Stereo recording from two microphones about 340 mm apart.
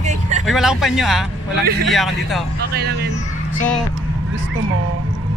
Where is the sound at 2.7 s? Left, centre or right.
Right.